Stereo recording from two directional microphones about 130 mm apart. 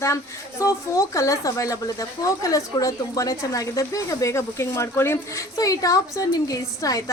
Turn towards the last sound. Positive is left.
turn(degrees=25)  # may be behind; listen again after turning